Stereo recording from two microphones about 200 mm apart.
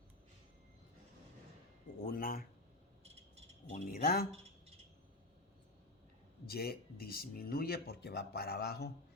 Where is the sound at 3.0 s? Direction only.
30° right (ahead or behind).